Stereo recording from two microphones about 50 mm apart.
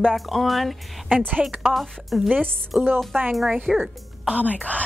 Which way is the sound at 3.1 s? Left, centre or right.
Right.